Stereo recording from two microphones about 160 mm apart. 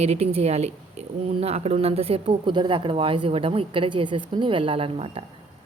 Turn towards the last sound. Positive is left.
turn(degrees=-35)  # may be behind; listen again after turning